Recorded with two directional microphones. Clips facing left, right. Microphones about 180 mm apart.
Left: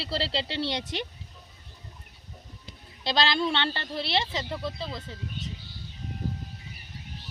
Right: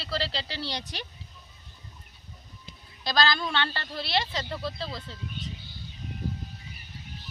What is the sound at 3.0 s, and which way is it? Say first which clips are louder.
Speech: left 1 dB; 25° left (ahead or behind).